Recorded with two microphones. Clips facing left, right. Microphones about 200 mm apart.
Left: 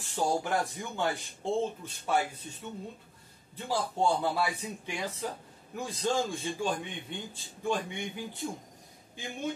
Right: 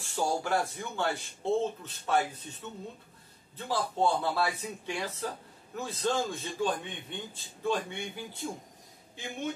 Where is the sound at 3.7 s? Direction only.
15° left (ahead or behind).